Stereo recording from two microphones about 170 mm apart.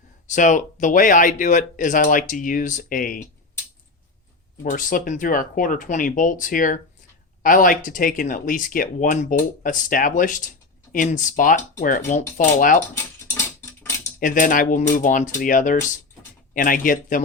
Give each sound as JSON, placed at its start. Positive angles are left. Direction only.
{"t": 0.3, "sound": "speech", "side_deg": 45}
{"t": 4.6, "sound": "speech", "side_deg": 50}
{"t": 13.0, "sound": "a sound", "side_deg": 15}
{"t": 14.2, "sound": "speech", "side_deg": 55}